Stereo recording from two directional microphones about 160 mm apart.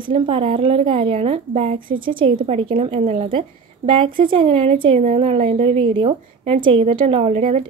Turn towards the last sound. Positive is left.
turn(degrees=-40)  # may be behind; listen again after turning